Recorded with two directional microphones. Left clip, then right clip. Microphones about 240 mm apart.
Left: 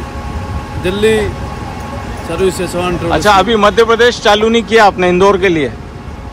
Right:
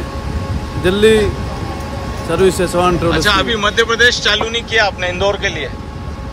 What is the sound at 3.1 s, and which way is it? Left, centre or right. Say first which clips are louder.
Speech: left 5 dB; centre.